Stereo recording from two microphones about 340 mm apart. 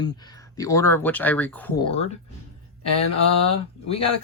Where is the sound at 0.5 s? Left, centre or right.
Centre.